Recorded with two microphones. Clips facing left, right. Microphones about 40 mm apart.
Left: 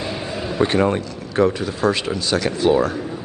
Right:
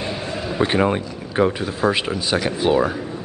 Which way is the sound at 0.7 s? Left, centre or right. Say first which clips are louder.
Even; centre.